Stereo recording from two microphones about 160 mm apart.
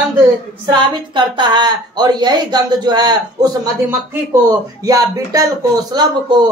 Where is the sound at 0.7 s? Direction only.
30° right (ahead or behind).